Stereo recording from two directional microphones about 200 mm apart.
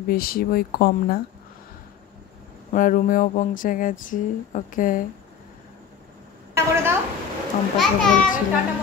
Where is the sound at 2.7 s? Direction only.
40° left (ahead or behind).